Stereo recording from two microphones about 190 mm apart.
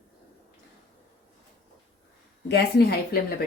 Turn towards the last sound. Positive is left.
turn(degrees=55)  # may be behind; listen again after turning